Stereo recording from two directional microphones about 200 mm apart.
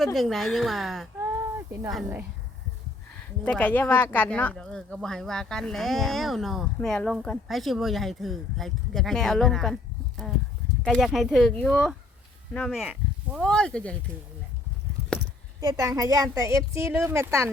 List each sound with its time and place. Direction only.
0.0 s speech: centre (ahead or behind)
3.4 s speech: 10° left (ahead or behind)
10.8 s speech: centre (ahead or behind)
15.6 s a woman's voice: 15° right (ahead or behind)